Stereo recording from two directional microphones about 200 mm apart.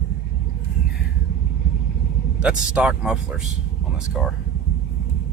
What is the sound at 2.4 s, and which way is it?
Speech, 5° right (ahead or behind).